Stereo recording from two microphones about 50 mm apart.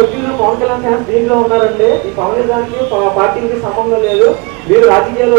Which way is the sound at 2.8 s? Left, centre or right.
Centre.